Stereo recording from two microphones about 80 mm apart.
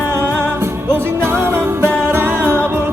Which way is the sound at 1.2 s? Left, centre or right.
Right.